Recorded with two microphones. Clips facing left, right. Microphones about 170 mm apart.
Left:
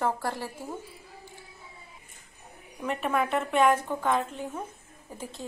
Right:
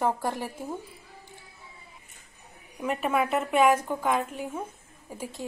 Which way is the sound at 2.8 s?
5° right (ahead or behind).